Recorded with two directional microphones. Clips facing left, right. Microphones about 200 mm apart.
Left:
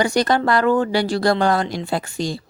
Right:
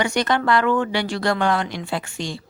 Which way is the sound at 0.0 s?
35° left (ahead or behind).